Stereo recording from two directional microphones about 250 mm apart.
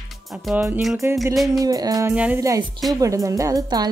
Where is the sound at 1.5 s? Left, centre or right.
Centre.